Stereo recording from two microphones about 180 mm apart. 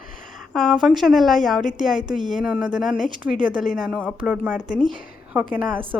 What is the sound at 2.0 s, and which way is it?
Speech, 25° right (ahead or behind).